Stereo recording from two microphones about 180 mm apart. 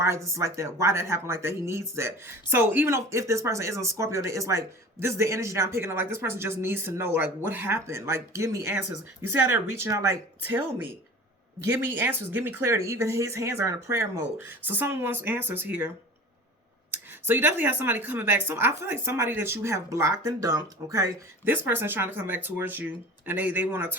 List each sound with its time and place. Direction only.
0.0 s speech: 15° right (ahead or behind)
16.9 s speech: 10° right (ahead or behind)